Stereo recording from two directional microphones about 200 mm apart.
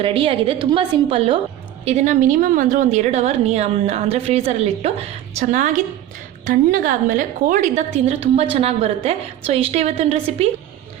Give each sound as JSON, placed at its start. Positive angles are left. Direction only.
{"t": 0.0, "sound": "a woman's voice", "side_deg": -25}